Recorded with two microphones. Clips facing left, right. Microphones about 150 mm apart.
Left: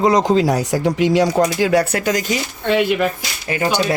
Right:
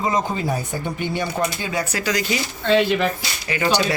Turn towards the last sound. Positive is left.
turn(degrees=45)  # may be behind; listen again after turning